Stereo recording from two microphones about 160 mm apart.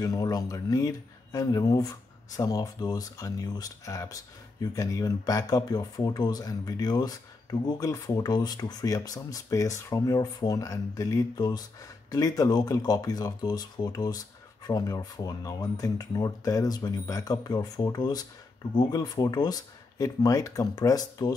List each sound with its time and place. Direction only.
0.0 s speech: 25° left (ahead or behind)